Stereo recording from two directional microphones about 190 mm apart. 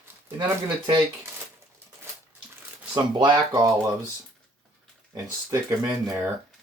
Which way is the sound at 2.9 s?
25° right (ahead or behind).